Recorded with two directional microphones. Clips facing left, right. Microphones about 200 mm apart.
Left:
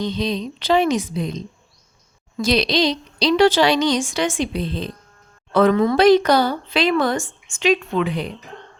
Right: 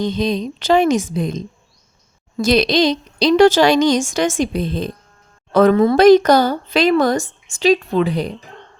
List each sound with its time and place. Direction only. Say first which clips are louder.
0.0 s a woman's voice: right 4 dB; 45° right (ahead or behind); by 6.0 s 30° right (ahead or behind)
6.0 s a woman's voice: right 4 dB; 45° right (ahead or behind)